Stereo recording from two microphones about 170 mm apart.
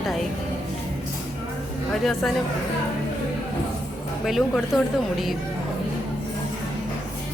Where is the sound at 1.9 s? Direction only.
Centre (ahead or behind).